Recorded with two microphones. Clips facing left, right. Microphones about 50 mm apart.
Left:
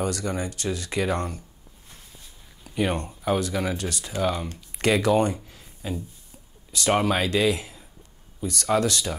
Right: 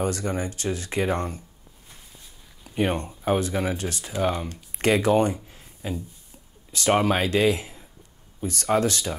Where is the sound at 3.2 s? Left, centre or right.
Right.